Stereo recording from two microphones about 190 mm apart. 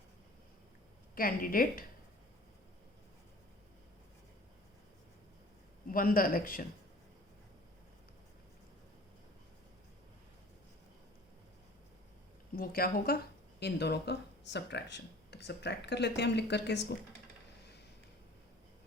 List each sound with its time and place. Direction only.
1.1 s a woman's voice: 50° left (ahead or behind)
5.9 s a woman's voice: 50° left (ahead or behind)
12.5 s a woman's voice: 50° left (ahead or behind)